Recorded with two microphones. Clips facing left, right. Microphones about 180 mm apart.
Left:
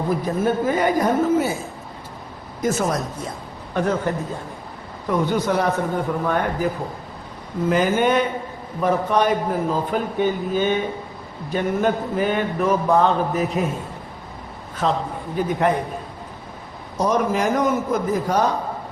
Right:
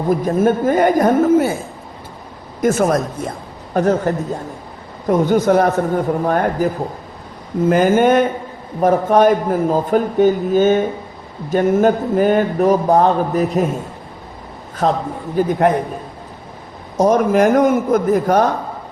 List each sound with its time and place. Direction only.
0.1 s speech: 45° right (ahead or behind)
2.6 s speech: 55° right (ahead or behind)
7.7 s a man's voice: 50° right (ahead or behind)
14.8 s speech: 45° right (ahead or behind)
17.0 s speech: 50° right (ahead or behind)